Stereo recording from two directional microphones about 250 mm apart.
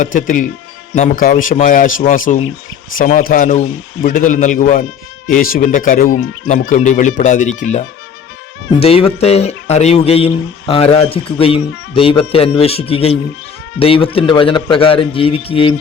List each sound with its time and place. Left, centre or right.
0.0 s a man's voice: left